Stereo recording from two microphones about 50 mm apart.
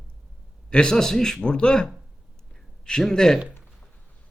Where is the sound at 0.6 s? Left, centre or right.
Centre.